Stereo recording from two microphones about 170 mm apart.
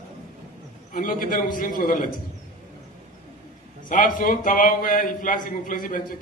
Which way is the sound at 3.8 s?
50° left (ahead or behind).